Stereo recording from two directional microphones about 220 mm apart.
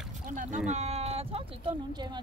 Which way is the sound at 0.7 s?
30° right (ahead or behind).